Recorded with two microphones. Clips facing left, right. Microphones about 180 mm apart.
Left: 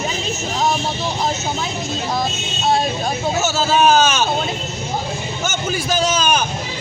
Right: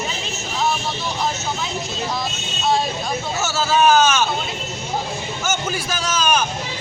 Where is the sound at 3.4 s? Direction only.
20° left (ahead or behind).